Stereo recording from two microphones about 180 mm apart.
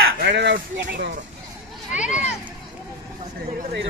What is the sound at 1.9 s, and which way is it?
Speech, 40° left (ahead or behind).